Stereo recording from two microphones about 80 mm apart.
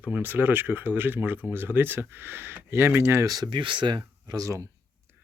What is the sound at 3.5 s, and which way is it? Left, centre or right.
Speech, right.